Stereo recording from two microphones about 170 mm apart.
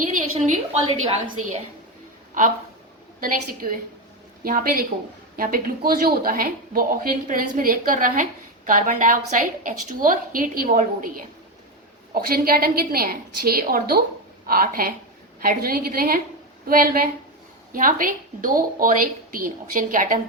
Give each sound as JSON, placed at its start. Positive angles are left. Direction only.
{"t": 0.2, "sound": "a woman's voice", "side_deg": -45}
{"t": 3.2, "sound": "speech", "side_deg": -55}